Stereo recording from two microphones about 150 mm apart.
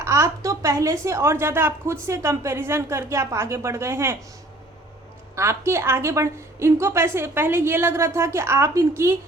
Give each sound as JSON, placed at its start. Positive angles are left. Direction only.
{"t": 0.0, "sound": "a sound", "side_deg": -20}
{"t": 1.0, "sound": "a woman's voice", "side_deg": -20}
{"t": 5.4, "sound": "a woman's voice", "side_deg": -20}